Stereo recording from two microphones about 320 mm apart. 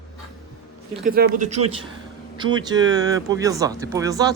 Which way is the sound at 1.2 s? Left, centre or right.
Right.